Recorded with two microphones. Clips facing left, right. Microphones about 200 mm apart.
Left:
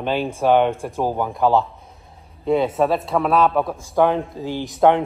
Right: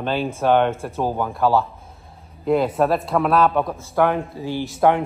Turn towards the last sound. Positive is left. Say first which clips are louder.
# left 2 dB
turn(degrees=20)  # may be behind; listen again after turning